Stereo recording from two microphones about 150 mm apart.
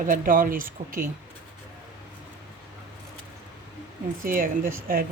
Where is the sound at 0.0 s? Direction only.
65° right (ahead or behind).